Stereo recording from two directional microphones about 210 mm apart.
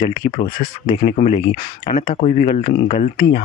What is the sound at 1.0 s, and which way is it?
Speech, 35° left (ahead or behind).